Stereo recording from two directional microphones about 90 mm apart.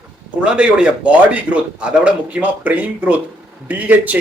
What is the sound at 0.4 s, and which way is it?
Speech, 10° right (ahead or behind).